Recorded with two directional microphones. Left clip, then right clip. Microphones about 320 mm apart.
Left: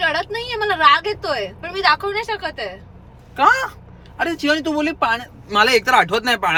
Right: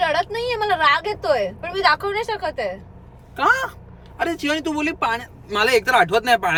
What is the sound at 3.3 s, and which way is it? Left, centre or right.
Speech, centre.